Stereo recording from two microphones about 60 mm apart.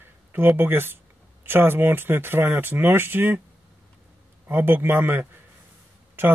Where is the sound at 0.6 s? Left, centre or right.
Right.